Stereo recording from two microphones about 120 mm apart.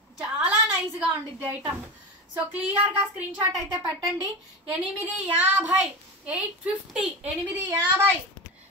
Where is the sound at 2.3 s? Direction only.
15° right (ahead or behind).